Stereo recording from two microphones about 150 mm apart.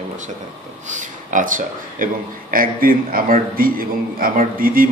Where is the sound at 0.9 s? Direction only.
60° right (ahead or behind).